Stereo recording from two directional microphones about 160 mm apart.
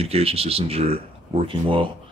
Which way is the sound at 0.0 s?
35° right (ahead or behind).